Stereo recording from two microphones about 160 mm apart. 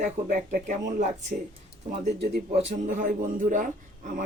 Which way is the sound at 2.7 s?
50° right (ahead or behind).